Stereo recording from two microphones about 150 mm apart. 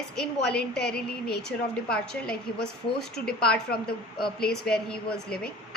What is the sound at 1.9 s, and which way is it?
Speech, 5° left (ahead or behind).